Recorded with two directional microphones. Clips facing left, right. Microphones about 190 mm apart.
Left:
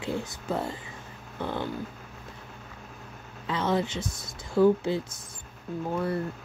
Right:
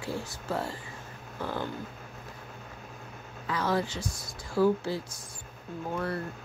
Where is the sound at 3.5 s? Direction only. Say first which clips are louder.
Left 2 dB; 25° left (ahead or behind).